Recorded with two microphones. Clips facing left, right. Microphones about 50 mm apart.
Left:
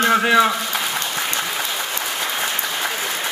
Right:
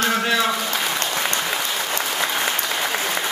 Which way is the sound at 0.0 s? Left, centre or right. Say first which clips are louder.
Left 5 dB; centre.